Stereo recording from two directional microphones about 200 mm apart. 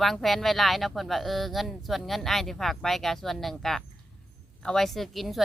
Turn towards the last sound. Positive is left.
turn(degrees=0)  # may be behind; listen again after turning